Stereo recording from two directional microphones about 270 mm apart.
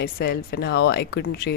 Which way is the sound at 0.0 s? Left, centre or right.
Left.